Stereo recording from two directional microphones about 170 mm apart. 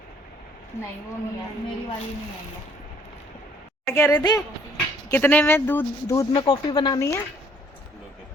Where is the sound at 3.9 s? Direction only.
15° left (ahead or behind).